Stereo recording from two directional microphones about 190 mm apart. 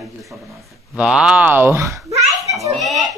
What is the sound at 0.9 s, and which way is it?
Speech, 5° right (ahead or behind).